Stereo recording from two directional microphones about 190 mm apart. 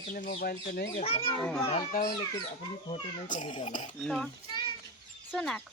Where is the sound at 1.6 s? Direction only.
35° left (ahead or behind).